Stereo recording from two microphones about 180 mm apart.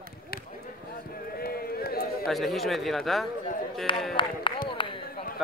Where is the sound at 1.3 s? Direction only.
55° left (ahead or behind).